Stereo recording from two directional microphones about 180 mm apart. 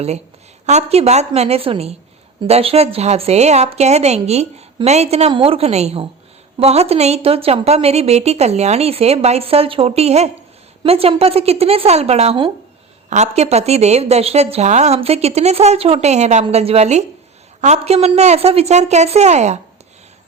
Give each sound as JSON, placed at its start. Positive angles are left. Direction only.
{"t": 0.6, "sound": "a woman's voice", "side_deg": -40}